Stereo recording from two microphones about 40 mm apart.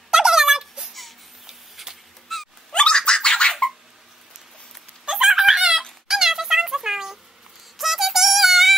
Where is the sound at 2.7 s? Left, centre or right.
Left.